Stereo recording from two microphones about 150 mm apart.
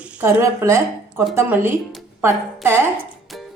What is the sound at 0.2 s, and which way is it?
A woman's voice, 15° right (ahead or behind).